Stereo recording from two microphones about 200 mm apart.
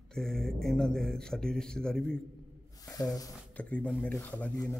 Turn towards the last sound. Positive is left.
turn(degrees=5)  # may be behind; listen again after turning